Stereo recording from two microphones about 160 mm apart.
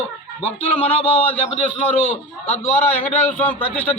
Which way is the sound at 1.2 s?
10° left (ahead or behind).